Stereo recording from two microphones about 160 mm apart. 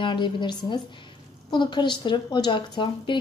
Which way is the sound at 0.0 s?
30° left (ahead or behind).